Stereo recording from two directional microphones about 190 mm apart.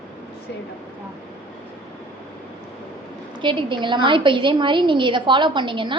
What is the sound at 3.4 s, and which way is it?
A woman's voice, 25° right (ahead or behind).